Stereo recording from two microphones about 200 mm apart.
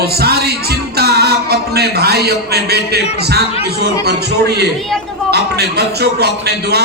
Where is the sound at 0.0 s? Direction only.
50° right (ahead or behind).